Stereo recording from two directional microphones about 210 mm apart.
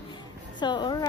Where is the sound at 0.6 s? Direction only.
20° left (ahead or behind).